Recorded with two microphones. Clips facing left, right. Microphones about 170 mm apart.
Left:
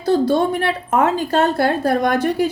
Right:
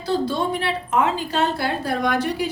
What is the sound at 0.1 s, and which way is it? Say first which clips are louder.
A woman's voice: left 6 dB; 50° left (ahead or behind).